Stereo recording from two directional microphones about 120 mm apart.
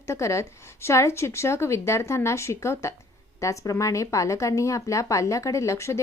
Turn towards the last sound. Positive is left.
turn(degrees=25)  # may be behind; listen again after turning